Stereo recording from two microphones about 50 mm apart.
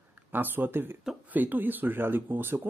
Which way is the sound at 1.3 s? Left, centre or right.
Right.